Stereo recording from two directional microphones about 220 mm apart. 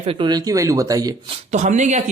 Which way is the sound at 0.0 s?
25° right (ahead or behind).